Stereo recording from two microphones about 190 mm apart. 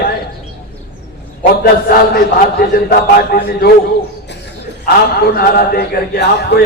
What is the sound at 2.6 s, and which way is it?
A man's voice, 55° left (ahead or behind).